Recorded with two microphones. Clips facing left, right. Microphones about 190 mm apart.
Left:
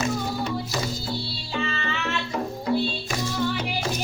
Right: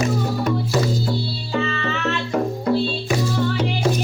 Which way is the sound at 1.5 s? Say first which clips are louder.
Right 5 dB; 55° right (ahead or behind).